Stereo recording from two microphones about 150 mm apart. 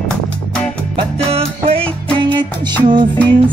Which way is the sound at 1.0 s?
40° right (ahead or behind).